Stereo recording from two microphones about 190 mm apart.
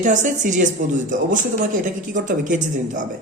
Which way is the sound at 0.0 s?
40° right (ahead or behind).